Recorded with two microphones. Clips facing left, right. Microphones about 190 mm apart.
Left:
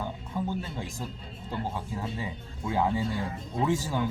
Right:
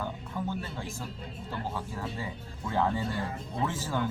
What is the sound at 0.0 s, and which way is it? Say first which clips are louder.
Music: left 2 dB; 15° left (ahead or behind).